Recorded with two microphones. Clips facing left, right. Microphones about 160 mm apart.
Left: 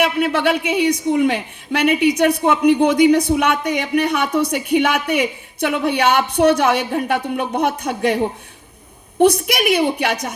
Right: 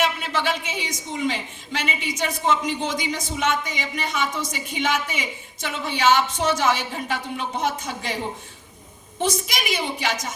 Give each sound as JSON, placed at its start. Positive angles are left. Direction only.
{"t": 0.0, "sound": "a woman's voice", "side_deg": 60}